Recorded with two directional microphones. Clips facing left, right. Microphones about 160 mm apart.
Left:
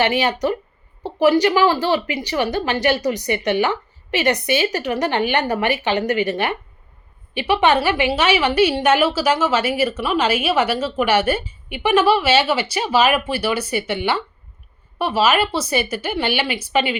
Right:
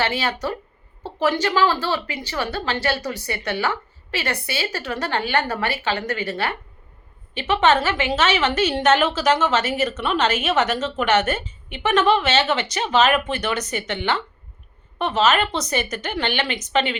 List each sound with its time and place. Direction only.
0.0 s a woman's voice: 15° left (ahead or behind)